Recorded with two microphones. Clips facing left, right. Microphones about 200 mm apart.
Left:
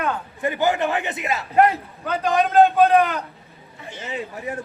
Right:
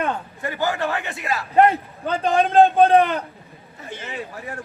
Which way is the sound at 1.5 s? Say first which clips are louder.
Right 2 dB; 25° right (ahead or behind).